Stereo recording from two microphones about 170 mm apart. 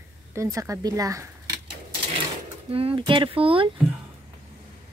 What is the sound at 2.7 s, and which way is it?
Speech, 35° right (ahead or behind).